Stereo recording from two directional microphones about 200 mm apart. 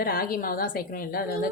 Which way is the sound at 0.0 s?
45° left (ahead or behind).